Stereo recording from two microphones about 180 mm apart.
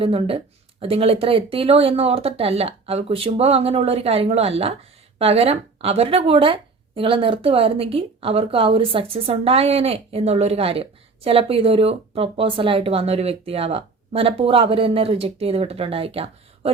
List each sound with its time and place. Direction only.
0.0 s speech: 30° right (ahead or behind)